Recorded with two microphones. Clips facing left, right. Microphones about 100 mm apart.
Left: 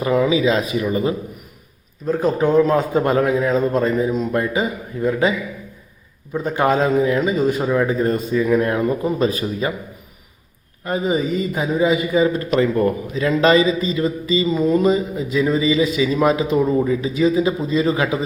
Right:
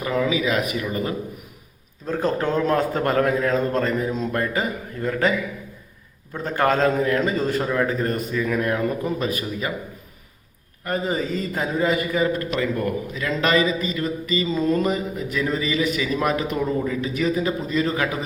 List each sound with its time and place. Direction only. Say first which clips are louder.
0.0 s a man's voice: left 6 dB; 25° left (ahead or behind)
2.0 s a man's voice: left 5 dB; 5° left (ahead or behind)
4.1 s speech: left 4 dB; 5° left (ahead or behind)
4.4 s a man's voice: left 4 dB; 15° left (ahead or behind)
6.3 s a man's voice: left 3 dB; 15° left (ahead or behind)
10.8 s a man's voice: left 4 dB; 15° left (ahead or behind)
12.5 s a man's voice: left 7 dB; 30° left (ahead or behind)
14.4 s a man's voice: left 5 dB; 10° left (ahead or behind)